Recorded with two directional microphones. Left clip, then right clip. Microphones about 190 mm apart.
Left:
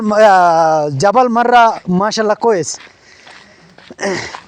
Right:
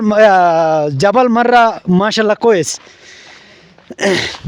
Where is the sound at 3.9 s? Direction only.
35° right (ahead or behind).